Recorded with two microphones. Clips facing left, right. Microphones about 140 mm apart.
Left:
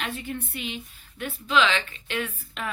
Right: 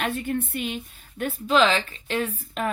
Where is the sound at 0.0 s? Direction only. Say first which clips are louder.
Right 6 dB; 50° right (ahead or behind).